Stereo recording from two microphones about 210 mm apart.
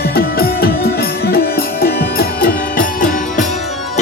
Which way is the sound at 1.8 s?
45° left (ahead or behind).